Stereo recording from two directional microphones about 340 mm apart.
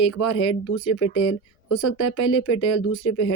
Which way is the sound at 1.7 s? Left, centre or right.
Left.